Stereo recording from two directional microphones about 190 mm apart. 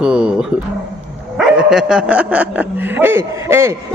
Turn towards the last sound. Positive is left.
turn(degrees=-15)  # may be behind; listen again after turning